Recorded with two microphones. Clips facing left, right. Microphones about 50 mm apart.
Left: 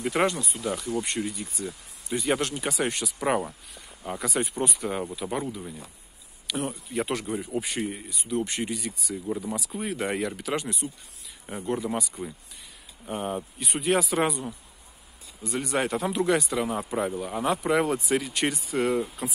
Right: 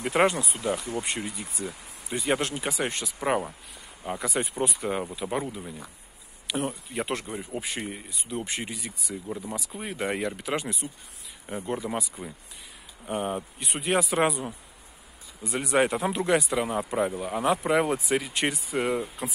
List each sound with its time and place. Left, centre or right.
0.0 s speech: right
1.0 s speech: centre